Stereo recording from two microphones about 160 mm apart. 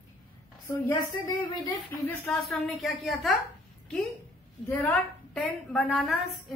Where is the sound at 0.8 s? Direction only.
20° left (ahead or behind).